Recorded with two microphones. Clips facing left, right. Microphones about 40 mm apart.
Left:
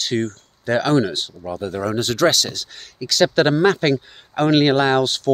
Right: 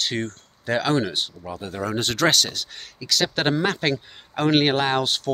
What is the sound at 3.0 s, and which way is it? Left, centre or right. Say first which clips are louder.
Speech: left 6 dB; centre.